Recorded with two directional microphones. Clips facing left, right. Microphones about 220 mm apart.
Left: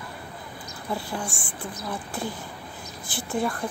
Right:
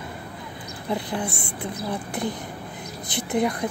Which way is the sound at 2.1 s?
20° right (ahead or behind).